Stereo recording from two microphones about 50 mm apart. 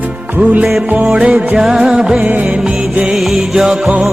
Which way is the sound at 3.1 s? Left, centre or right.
Centre.